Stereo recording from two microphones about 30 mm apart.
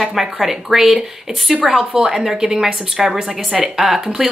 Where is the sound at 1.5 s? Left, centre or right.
Centre.